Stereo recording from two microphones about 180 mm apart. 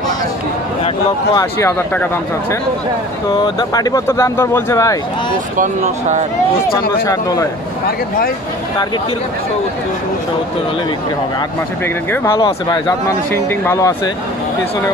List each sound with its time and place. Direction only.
1.3 s speech: 15° left (ahead or behind)
3.4 s speech: 20° left (ahead or behind)
5.6 s speech: 40° right (ahead or behind)
7.1 s speech: 20° left (ahead or behind)
12.7 s speech: 15° left (ahead or behind)